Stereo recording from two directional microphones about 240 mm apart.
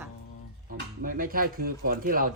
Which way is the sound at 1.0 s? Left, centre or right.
Right.